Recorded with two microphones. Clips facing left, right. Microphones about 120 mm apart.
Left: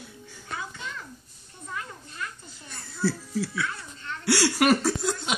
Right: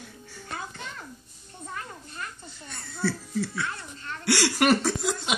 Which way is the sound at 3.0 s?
10° left (ahead or behind).